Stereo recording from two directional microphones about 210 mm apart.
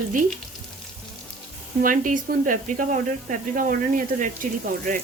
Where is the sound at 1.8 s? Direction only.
40° right (ahead or behind).